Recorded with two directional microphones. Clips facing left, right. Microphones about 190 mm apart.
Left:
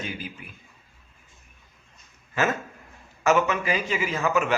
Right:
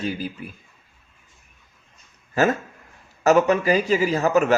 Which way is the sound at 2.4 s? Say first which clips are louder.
Right 5 dB; 40° right (ahead or behind).